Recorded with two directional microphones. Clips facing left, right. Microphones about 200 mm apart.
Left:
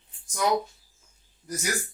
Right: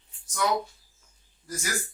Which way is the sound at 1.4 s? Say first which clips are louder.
Left 2 dB; 20° left (ahead or behind).